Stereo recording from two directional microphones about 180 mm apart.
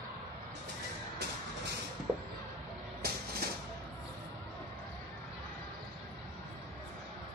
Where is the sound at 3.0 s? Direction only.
60° right (ahead or behind).